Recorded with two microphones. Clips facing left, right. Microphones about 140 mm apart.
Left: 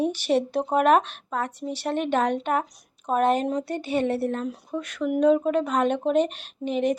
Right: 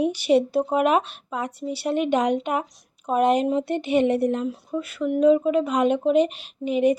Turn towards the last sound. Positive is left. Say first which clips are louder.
# right 4 dB
turn(degrees=-10)  # may be behind; listen again after turning